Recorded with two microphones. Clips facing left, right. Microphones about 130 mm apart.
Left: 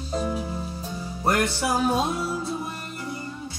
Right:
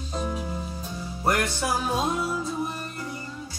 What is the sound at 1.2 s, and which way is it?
Music, 30° left (ahead or behind).